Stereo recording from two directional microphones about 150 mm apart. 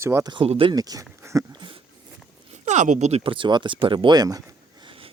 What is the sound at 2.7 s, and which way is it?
Speech, 50° right (ahead or behind).